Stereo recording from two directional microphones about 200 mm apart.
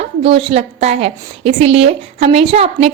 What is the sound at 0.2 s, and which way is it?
A woman's voice, 25° right (ahead or behind).